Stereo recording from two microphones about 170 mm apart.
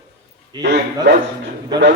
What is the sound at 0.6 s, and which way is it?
Music, 80° right.